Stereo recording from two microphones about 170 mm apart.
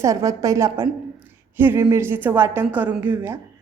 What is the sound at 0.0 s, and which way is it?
A woman's voice, 20° right (ahead or behind).